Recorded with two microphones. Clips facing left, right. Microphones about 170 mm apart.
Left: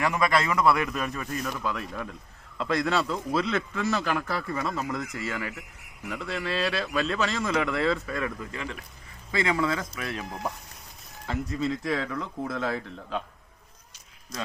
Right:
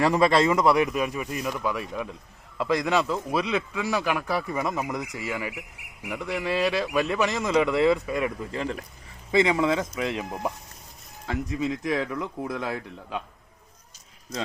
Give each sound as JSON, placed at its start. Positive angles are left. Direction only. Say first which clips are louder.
{"t": 0.0, "sound": "a man's voice", "louder": "right 5 dB", "side_deg": -30}
{"t": 8.5, "sound": "speech", "louder": "right 6 dB", "side_deg": -35}
{"t": 9.3, "sound": "a man's voice", "louder": "right 5 dB", "side_deg": -20}